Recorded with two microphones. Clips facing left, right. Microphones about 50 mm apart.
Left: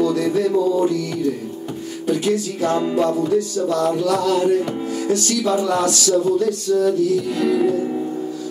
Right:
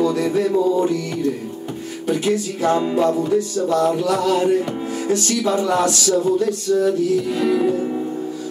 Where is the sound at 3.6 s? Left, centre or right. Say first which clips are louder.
Right 1 dB; right.